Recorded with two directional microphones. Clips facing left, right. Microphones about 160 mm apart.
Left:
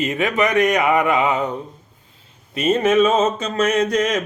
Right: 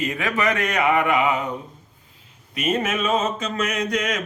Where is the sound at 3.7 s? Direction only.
30° left (ahead or behind).